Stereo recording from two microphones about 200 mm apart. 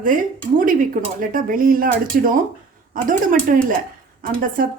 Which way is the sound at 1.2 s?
45° right (ahead or behind).